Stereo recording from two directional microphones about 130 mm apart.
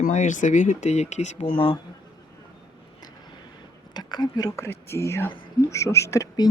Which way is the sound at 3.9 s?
30° left (ahead or behind).